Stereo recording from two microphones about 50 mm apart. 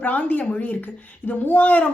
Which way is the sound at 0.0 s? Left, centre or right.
Left.